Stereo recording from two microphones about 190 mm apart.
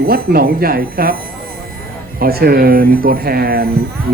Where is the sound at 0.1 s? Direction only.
50° right (ahead or behind).